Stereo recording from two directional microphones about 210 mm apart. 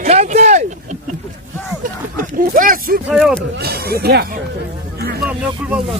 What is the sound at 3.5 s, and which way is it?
Speech, 50° right (ahead or behind).